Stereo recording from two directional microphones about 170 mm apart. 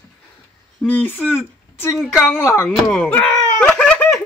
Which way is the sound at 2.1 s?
15° left (ahead or behind).